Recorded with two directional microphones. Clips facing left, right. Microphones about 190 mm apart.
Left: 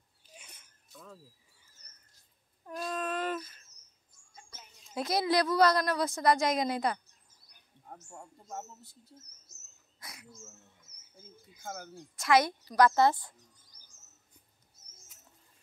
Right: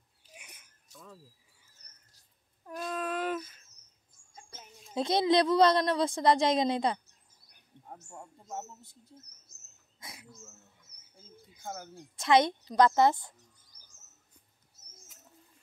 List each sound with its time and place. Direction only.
0.3 s a sound: 15° right (ahead or behind)
2.6 s wail: 5° right (ahead or behind)
4.5 s a sound: 15° right (ahead or behind)
5.0 s a woman's voice: 25° right (ahead or behind)
7.9 s speech: 10° right (ahead or behind)
9.9 s cricket: 25° right (ahead or behind)
11.6 s speech: 10° right (ahead or behind)
12.3 s a woman's voice: 25° right (ahead or behind)